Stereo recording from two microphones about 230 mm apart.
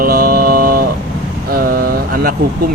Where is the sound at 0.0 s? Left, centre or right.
Right.